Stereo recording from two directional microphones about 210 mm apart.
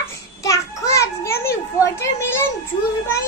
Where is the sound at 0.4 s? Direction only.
15° left (ahead or behind).